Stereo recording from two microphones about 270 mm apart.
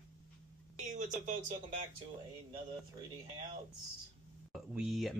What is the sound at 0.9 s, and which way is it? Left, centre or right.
Speech, right.